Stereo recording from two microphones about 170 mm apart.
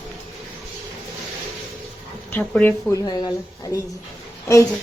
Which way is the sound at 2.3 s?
10° left (ahead or behind).